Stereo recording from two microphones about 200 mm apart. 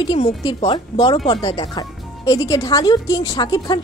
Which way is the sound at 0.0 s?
25° left (ahead or behind).